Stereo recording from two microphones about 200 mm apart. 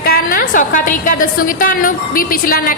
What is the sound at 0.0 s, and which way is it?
A woman's voice, 45° left (ahead or behind).